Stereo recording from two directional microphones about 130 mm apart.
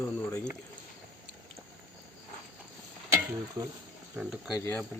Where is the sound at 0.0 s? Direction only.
20° left (ahead or behind).